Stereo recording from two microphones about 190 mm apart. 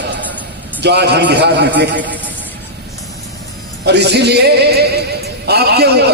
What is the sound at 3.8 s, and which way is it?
Music, 60° right (ahead or behind).